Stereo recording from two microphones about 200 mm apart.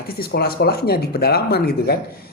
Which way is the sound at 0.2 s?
50° left (ahead or behind).